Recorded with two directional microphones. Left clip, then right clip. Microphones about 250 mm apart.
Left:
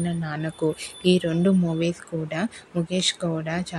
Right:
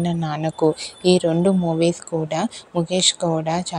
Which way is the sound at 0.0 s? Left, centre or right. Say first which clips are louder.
Right 6 dB; right.